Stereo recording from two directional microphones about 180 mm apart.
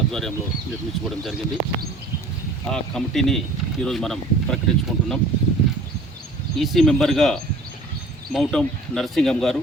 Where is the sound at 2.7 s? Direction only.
Centre (ahead or behind).